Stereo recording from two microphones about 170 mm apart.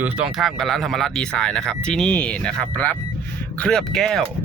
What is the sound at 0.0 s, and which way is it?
Speech, 10° right (ahead or behind).